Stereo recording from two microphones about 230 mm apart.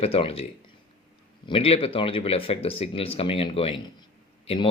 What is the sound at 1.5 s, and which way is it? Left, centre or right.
Speech, left.